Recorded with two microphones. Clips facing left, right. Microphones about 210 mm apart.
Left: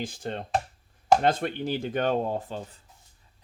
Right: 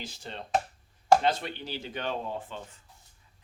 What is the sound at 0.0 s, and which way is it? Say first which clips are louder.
Chopping: left 8 dB; 50° left (ahead or behind).